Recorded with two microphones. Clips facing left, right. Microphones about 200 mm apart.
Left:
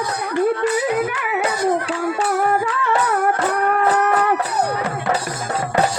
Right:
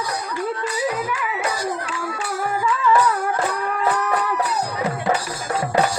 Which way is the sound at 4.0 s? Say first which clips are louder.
Left 5 dB; 65° left (ahead or behind).